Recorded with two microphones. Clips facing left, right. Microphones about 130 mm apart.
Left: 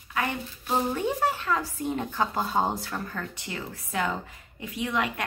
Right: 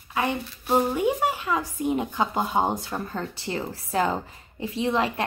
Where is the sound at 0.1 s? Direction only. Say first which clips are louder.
Right 3 dB; 25° right (ahead or behind).